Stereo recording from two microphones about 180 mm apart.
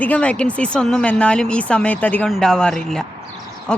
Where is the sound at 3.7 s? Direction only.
5° left (ahead or behind).